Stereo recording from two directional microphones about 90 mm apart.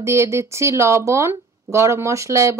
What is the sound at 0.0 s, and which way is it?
Speech, 30° right (ahead or behind).